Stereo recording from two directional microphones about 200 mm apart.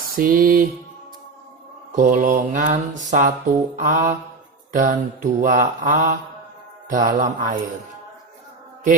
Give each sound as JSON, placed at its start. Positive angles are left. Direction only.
{"t": 0.2, "sound": "mantra", "side_deg": -45}
{"t": 1.9, "sound": "music", "side_deg": -40}
{"t": 4.7, "sound": "mantra", "side_deg": -45}